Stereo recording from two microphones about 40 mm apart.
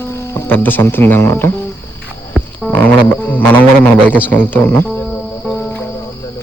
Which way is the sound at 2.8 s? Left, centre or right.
Left.